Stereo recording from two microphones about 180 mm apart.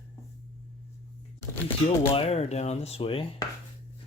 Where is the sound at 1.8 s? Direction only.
35° left (ahead or behind).